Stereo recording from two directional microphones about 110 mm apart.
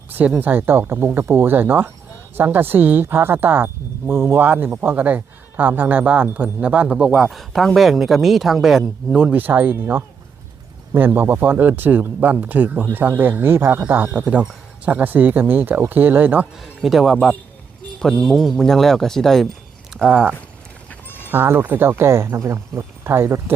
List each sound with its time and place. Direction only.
0.1 s speech: 15° right (ahead or behind)
7.3 s speech: centre (ahead or behind); by 16.5 s 15° right (ahead or behind)
16.8 s speech: centre (ahead or behind)
18.0 s speech: 5° left (ahead or behind)
20.1 s speech: 10° right (ahead or behind)